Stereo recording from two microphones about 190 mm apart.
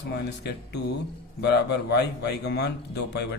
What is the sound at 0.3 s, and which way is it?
Speech, 60° left (ahead or behind).